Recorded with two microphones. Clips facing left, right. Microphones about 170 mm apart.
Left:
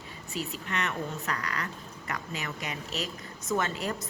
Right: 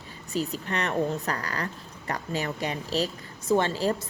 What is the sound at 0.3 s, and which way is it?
A woman's voice, 35° right (ahead or behind).